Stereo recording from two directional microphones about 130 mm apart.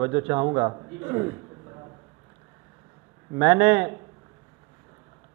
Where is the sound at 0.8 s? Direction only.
15° right (ahead or behind).